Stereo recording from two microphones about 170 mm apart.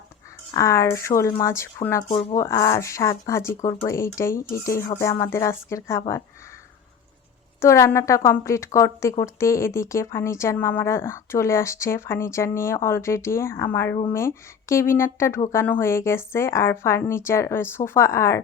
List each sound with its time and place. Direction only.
0.5 s speech: 15° left (ahead or behind)
7.6 s speech: 15° left (ahead or behind)